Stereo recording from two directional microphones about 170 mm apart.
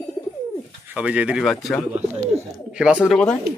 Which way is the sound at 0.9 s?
5° right (ahead or behind).